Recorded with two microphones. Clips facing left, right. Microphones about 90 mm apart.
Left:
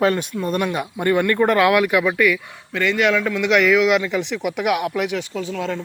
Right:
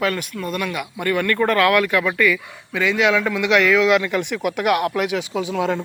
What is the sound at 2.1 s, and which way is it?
Speech, 5° left (ahead or behind).